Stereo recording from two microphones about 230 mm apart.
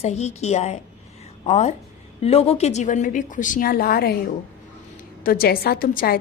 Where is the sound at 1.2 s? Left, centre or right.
Left.